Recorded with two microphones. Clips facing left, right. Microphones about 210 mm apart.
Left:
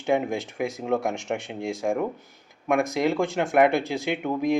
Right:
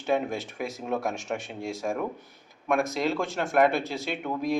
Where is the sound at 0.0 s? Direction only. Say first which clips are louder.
Left 3 dB; 15° left (ahead or behind).